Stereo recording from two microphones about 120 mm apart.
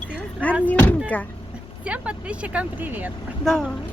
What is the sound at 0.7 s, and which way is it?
Speech, 15° left (ahead or behind).